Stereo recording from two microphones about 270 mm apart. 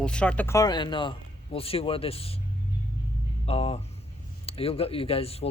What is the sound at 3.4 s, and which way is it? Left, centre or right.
Speech, left.